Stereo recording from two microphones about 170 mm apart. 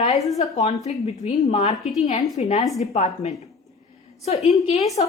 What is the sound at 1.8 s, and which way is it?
Speech, centre (ahead or behind).